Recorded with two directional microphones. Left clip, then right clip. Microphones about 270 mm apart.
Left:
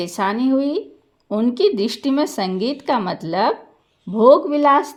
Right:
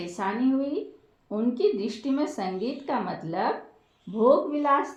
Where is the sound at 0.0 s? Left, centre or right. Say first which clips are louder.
Left 8 dB; left.